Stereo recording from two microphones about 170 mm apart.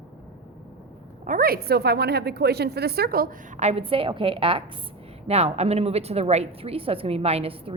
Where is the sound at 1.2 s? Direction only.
60° right (ahead or behind).